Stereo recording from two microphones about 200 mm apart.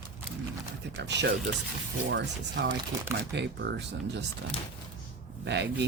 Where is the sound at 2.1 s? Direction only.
60° right (ahead or behind).